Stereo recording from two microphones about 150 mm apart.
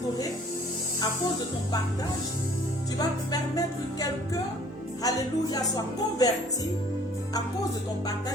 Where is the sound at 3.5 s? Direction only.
25° left (ahead or behind).